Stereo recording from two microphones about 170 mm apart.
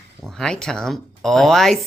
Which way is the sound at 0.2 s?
Centre (ahead or behind).